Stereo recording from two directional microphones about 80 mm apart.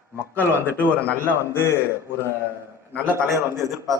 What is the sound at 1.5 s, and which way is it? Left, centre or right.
Speech, left.